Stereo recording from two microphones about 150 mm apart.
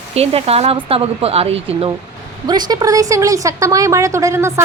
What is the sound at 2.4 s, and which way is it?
A woman's voice, 25° right (ahead or behind).